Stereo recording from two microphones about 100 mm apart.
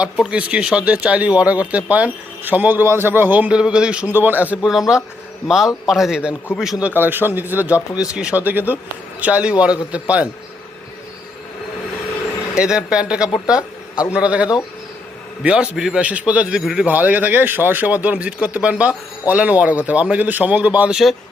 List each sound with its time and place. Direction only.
0.0 s speech: 10° right (ahead or behind)
4.6 s a man's voice: 5° right (ahead or behind)
6.8 s speech: 20° right (ahead or behind)
12.5 s speech: 10° right (ahead or behind)